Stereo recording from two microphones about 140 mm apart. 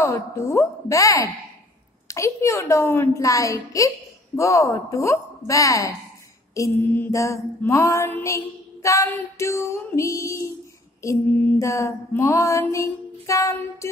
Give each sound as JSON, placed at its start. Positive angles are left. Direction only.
{"t": 0.0, "sound": "female singing", "side_deg": 20}